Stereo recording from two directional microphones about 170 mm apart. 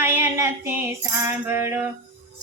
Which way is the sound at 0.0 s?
15° right (ahead or behind).